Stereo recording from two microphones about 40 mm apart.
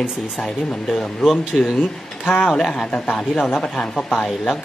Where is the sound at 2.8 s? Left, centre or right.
Left.